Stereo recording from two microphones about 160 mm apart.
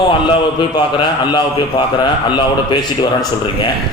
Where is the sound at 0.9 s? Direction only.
30° left (ahead or behind).